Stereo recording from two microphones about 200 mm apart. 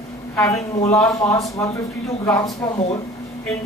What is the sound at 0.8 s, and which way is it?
A woman's voice, 15° left (ahead or behind).